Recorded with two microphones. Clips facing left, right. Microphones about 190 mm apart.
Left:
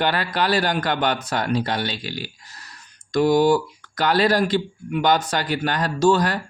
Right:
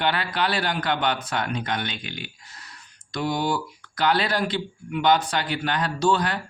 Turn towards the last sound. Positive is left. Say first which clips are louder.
# left 5 dB
turn(degrees=40)  # may be behind; listen again after turning